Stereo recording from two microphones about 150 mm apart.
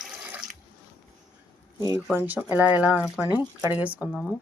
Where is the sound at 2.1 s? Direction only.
10° right (ahead or behind).